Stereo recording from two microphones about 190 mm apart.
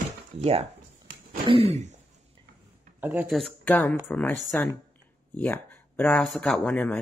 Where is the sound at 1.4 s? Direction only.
30° right (ahead or behind).